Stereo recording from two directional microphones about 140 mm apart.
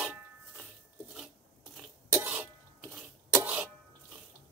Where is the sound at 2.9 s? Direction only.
15° right (ahead or behind).